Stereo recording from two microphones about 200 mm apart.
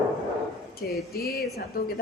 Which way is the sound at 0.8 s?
50° left (ahead or behind).